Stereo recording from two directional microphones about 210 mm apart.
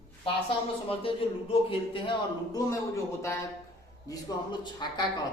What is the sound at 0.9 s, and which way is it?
Speech, 25° left (ahead or behind).